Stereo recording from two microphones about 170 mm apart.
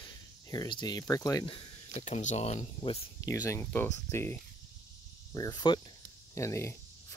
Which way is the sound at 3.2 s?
20° left (ahead or behind).